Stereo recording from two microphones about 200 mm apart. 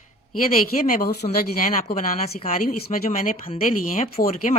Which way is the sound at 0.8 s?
45° left (ahead or behind).